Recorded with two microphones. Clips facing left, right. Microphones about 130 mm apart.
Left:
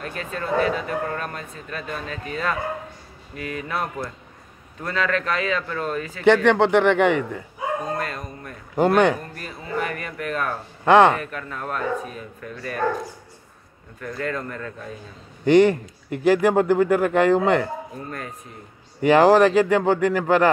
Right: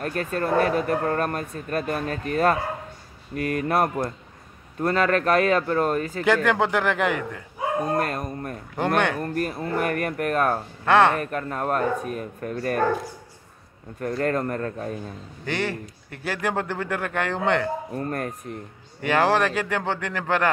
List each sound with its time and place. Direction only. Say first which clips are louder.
0.0 s speech: right 4 dB; 50° right (ahead or behind)
6.2 s a man's voice: left 6 dB; 5° right (ahead or behind)
7.9 s bow-wow: right 4 dB; 50° right (ahead or behind)
8.7 s speech: left 6 dB; 10° left (ahead or behind)
9.2 s speech: right 10 dB; 50° right (ahead or behind)
10.9 s speech: left 4 dB; 15° left (ahead or behind)
11.1 s speech: right 4 dB; 45° right (ahead or behind)
13.9 s speech: right 4 dB; 40° right (ahead or behind)
15.4 s speech: left 13 dB; 20° left (ahead or behind)
17.9 s speech: right 5 dB; 55° right (ahead or behind)
19.0 s speech: left 7 dB; 15° left (ahead or behind)